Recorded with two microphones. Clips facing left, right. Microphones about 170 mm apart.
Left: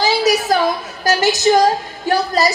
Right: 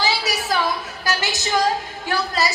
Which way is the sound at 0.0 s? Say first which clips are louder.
Left 8 dB; 40° left (ahead or behind).